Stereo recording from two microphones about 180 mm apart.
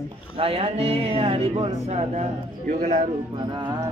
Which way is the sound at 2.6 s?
55° right (ahead or behind).